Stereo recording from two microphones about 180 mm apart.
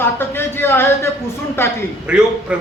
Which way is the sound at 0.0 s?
15° left (ahead or behind).